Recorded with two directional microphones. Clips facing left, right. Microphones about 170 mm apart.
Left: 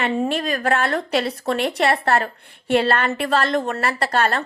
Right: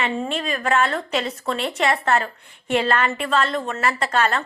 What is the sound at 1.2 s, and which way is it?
Speech, 35° left (ahead or behind).